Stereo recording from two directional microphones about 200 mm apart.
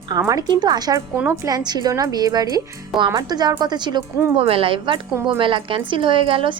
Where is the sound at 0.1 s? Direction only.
15° right (ahead or behind).